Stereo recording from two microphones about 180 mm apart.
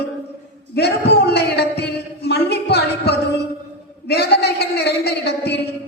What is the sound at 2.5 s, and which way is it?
Music, 65° left (ahead or behind).